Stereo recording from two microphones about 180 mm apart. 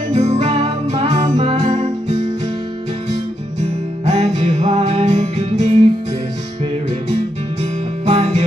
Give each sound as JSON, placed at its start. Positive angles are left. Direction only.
{"t": 0.1, "sound": "music", "side_deg": -35}
{"t": 4.0, "sound": "music", "side_deg": -40}
{"t": 8.0, "sound": "music", "side_deg": -40}